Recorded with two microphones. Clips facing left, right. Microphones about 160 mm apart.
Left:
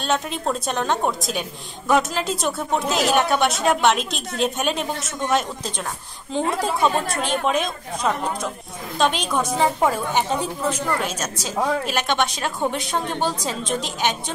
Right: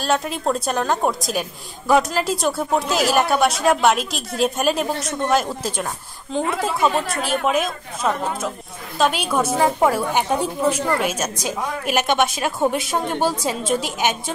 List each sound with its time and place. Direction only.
0.0 s a woman's voice: centre (ahead or behind)